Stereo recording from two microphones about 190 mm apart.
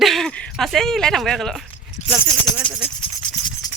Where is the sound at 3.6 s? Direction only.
20° left (ahead or behind).